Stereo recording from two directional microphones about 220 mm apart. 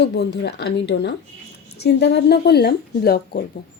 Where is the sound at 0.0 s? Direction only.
50° left (ahead or behind).